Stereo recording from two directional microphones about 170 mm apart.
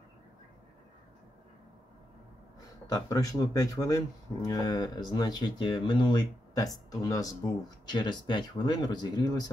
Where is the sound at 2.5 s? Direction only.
20° left (ahead or behind).